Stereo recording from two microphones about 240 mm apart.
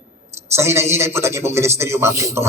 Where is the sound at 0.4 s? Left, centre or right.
Centre.